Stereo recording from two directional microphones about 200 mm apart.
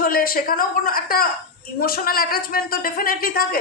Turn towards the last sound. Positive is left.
turn(degrees=45)  # may be behind; listen again after turning